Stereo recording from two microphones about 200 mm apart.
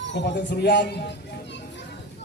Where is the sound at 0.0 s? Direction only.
60° left (ahead or behind).